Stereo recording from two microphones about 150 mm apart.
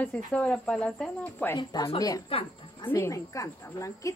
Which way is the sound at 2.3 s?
35° left (ahead or behind).